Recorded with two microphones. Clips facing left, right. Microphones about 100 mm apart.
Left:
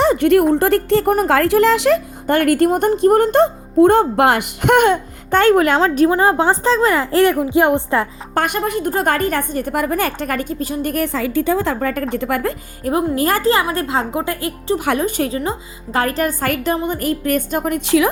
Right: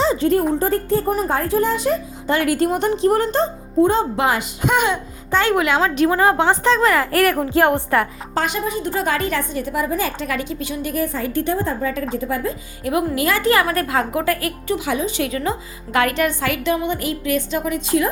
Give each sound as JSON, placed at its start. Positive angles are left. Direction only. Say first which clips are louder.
{"t": 0.0, "sound": "a sound", "louder": "left 4 dB", "side_deg": 60}
{"t": 0.5, "sound": "speech", "louder": "left 4 dB", "side_deg": 75}
{"t": 2.2, "sound": "speech", "louder": "left 4 dB", "side_deg": 50}
{"t": 6.1, "sound": "a woman's voice", "louder": "left 1 dB", "side_deg": 25}
{"t": 8.4, "sound": "a woman's voice", "louder": "left 3 dB", "side_deg": 55}
{"t": 10.9, "sound": "a woman's voice", "louder": "left 2 dB", "side_deg": 85}
{"t": 12.8, "sound": "a woman's voice", "louder": "left 2 dB", "side_deg": 35}
{"t": 13.5, "sound": "a woman's voice", "louder": "left 1 dB", "side_deg": 25}
{"t": 14.8, "sound": "a woman's voice", "louder": "left 4 dB", "side_deg": 60}
{"t": 15.4, "sound": "a woman's voice", "louder": "left 1 dB", "side_deg": 30}
{"t": 17.8, "sound": "a woman's voice", "louder": "left 5 dB", "side_deg": 90}